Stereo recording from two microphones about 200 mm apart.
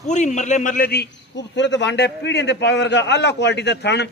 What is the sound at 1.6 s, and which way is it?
A man's voice, 60° left (ahead or behind).